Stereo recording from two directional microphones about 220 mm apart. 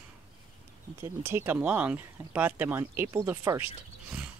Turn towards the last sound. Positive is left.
turn(degrees=-10)  # may be behind; listen again after turning